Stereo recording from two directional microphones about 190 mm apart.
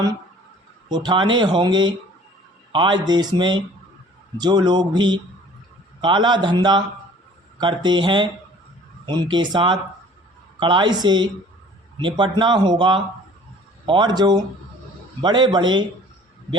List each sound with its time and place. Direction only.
0.9 s speech: 25° right (ahead or behind)